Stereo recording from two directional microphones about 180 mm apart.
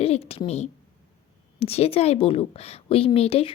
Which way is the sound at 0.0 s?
35° left (ahead or behind).